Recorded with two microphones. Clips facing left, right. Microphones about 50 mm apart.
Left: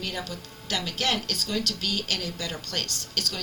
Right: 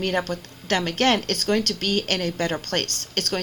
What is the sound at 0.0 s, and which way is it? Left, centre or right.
Speech, right.